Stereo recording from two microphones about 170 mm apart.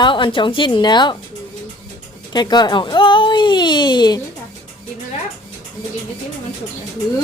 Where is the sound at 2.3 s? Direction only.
25° left (ahead or behind).